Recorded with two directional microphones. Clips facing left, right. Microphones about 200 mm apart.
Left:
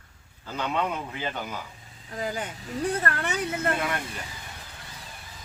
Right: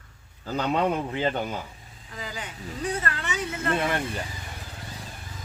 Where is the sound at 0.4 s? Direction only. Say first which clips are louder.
Right 4 dB; 35° right (ahead or behind).